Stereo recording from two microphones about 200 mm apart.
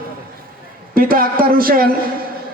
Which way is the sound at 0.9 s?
45° right (ahead or behind).